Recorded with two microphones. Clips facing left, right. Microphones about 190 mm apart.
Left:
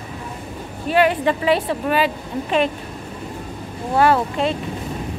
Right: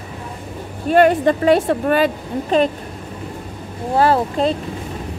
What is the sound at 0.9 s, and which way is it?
A woman's voice, 45° right (ahead or behind).